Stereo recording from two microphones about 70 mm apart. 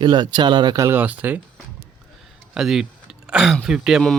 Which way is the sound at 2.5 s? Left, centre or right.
Centre.